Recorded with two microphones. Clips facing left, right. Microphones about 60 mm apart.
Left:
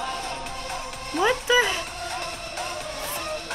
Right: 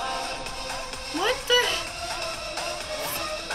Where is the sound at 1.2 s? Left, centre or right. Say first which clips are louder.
Left 3 dB; centre.